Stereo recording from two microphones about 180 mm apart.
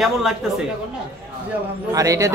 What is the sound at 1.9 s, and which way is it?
Speech, 15° right (ahead or behind).